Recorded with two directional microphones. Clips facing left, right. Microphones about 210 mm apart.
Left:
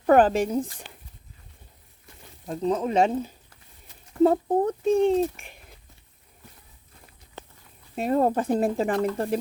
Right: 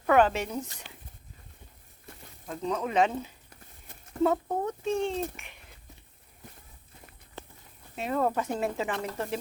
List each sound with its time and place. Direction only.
0.0 s speech: 35° left (ahead or behind)
2.5 s speech: 35° left (ahead or behind)
4.9 s speech: 45° left (ahead or behind)
7.9 s speech: 40° left (ahead or behind)